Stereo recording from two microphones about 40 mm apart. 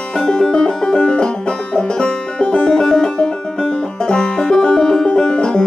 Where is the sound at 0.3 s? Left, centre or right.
Left.